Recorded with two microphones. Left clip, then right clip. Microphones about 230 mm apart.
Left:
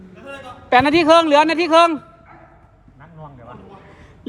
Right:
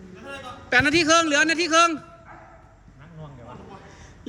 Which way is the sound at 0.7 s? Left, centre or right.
Centre.